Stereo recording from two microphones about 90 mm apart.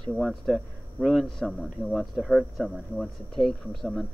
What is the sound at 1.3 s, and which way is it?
Speech, centre (ahead or behind).